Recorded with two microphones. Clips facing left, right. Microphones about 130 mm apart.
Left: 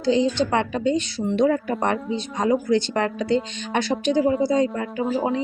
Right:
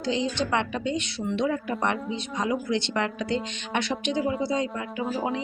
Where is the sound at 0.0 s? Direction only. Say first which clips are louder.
Left 7 dB; 35° left (ahead or behind).